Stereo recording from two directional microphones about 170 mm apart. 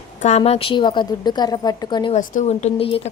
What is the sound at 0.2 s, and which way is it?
A woman's voice, 40° left (ahead or behind).